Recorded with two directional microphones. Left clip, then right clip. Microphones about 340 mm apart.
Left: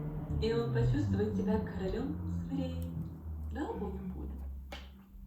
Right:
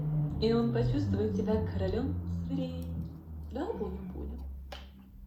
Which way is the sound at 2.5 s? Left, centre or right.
Centre.